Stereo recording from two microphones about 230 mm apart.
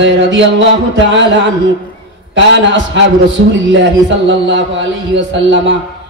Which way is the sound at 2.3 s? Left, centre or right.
Right.